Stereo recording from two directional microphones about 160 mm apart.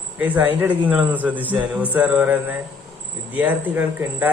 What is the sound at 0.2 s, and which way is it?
Speech, 10° right (ahead or behind).